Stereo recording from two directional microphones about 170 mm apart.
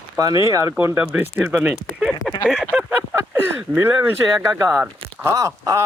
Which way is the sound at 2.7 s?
15° right (ahead or behind).